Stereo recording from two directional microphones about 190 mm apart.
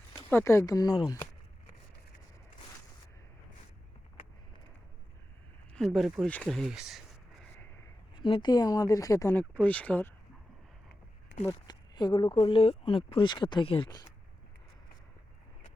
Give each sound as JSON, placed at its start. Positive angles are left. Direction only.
{"t": 0.3, "sound": "speech", "side_deg": 10}
{"t": 5.7, "sound": "speech", "side_deg": 0}
{"t": 8.1, "sound": "speech", "side_deg": 25}
{"t": 11.4, "sound": "speech", "side_deg": 20}